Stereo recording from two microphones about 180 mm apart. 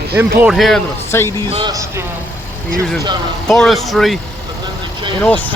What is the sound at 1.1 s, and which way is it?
Speech, 15° left (ahead or behind).